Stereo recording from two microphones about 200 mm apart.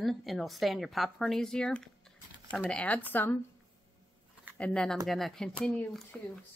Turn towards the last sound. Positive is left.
turn(degrees=5)  # may be behind; listen again after turning